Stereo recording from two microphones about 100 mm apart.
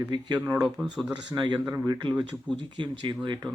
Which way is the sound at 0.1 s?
50° right (ahead or behind).